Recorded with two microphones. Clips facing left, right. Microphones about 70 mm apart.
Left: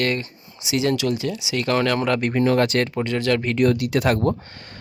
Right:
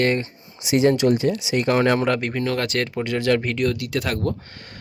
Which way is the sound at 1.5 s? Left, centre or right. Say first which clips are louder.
Right 1 dB; centre.